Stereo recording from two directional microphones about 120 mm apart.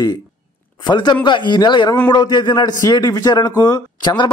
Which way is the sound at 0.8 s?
40° left (ahead or behind).